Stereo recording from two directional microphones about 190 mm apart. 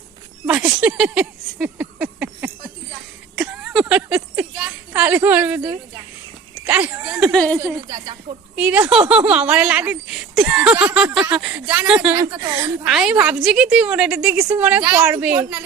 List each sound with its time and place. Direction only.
0.4 s a sound: 5° right (ahead or behind)
6.7 s speech: 10° right (ahead or behind)
7.6 s a woman's voice: 20° right (ahead or behind)
8.5 s a woman's voice: 5° right (ahead or behind)
12.8 s a woman's voice: 5° right (ahead or behind)